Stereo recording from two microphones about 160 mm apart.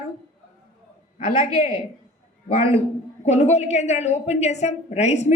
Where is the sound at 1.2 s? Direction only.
50° left (ahead or behind).